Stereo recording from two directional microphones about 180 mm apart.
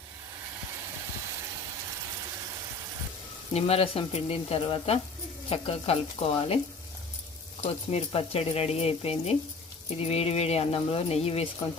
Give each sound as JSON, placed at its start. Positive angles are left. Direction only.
{"t": 3.5, "sound": "speech", "side_deg": 35}
{"t": 7.7, "sound": "speech", "side_deg": 35}